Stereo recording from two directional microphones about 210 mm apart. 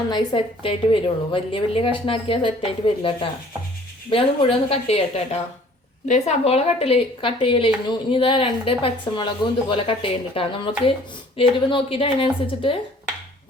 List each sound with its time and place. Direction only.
0.1 s speech: 25° left (ahead or behind)